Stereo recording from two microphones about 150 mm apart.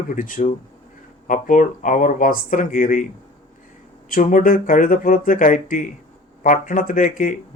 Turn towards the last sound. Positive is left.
turn(degrees=60)  # may be behind; listen again after turning